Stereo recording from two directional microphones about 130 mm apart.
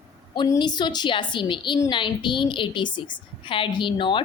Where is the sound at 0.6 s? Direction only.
35° left (ahead or behind).